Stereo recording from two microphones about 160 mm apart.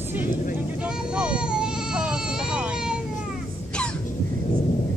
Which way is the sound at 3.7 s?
5° left (ahead or behind).